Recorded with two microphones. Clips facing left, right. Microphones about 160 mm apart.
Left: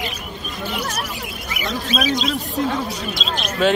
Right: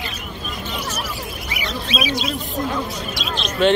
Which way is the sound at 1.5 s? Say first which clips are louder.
Left 4 dB; 45° left (ahead or behind).